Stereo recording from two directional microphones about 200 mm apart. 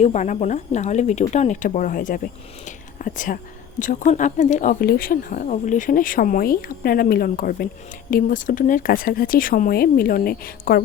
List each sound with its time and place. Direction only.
0.0 s speech: 35° left (ahead or behind)